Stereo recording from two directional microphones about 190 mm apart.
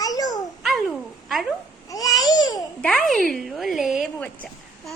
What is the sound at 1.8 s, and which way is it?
Babbling, 20° left (ahead or behind).